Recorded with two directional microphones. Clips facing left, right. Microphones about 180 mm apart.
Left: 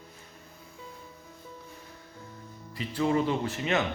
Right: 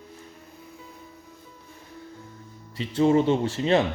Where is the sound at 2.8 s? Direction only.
25° right (ahead or behind).